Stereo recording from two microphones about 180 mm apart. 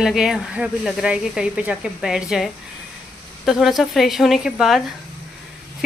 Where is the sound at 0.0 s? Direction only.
5° right (ahead or behind).